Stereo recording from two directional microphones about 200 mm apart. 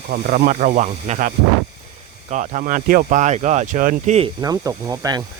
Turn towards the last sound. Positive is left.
turn(degrees=-15)  # may be behind; listen again after turning